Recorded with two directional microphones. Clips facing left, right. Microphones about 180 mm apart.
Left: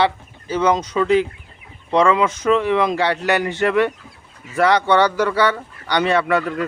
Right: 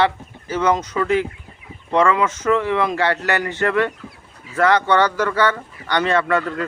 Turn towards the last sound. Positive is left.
turn(degrees=15)  # may be behind; listen again after turning